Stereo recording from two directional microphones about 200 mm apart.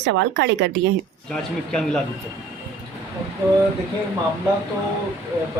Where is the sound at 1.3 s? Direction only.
5° left (ahead or behind).